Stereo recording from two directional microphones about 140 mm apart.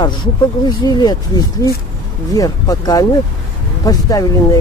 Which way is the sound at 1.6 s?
20° left (ahead or behind).